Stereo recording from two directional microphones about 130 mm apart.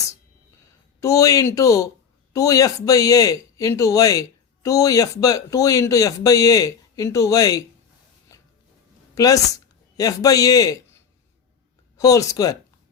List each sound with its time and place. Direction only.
1.0 s speech: 25° left (ahead or behind)
8.3 s a sound: 25° left (ahead or behind)
9.1 s speech: 25° left (ahead or behind)
11.9 s speech: 25° left (ahead or behind)